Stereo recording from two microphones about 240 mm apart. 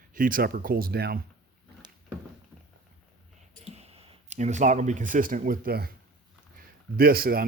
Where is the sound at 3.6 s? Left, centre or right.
Right.